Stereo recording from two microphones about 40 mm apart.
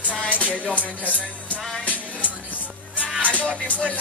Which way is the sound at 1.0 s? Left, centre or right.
Left.